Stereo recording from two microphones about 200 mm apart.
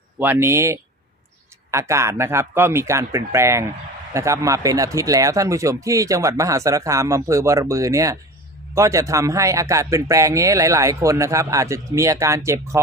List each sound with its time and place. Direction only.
0.2 s speech: 10° right (ahead or behind)